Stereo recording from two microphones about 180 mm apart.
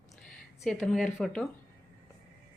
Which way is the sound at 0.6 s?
Centre (ahead or behind).